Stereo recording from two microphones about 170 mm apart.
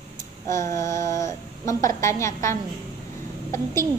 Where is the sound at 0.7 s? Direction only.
15° left (ahead or behind).